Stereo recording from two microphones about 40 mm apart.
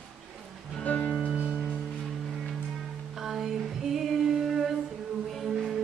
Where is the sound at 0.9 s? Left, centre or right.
Left.